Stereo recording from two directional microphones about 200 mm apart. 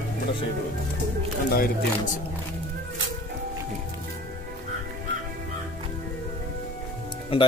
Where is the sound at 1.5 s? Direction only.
45° left (ahead or behind).